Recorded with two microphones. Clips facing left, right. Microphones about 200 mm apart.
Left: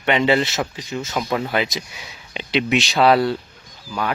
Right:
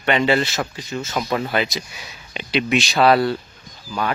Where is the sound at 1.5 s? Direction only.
15° left (ahead or behind).